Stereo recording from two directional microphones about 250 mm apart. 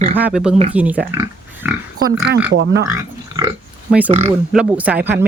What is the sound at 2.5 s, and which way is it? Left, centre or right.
Speech, right.